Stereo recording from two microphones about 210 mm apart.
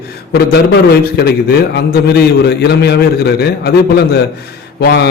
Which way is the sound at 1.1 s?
50° left (ahead or behind).